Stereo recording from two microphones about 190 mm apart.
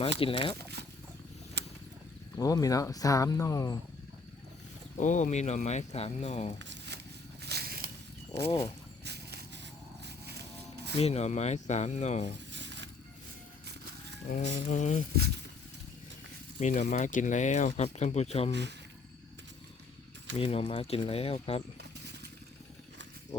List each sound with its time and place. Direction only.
0.2 s speech: 30° left (ahead or behind)
0.6 s speech: 60° right (ahead or behind)
2.3 s speech: 20° left (ahead or behind)
4.9 s speech: 40° left (ahead or behind)
6.6 s a sound: 65° right (ahead or behind)
7.4 s a sound: 55° right (ahead or behind)
9.0 s vehicle: 60° right (ahead or behind)
10.0 s music: 60° right (ahead or behind)
10.9 s speech: 35° left (ahead or behind)
12.5 s a sound: 70° right (ahead or behind)
14.3 s speech: 40° left (ahead or behind)
16.6 s speech: 40° left (ahead or behind)
20.3 s speech: 30° left (ahead or behind)
21.8 s a sound: 60° right (ahead or behind)